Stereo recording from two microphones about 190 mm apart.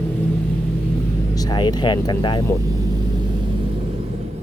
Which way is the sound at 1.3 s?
20° left (ahead or behind).